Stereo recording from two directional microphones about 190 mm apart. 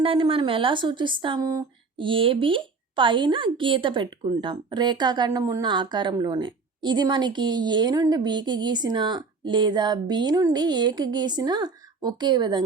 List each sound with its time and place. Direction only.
0.0 s speech: 25° right (ahead or behind)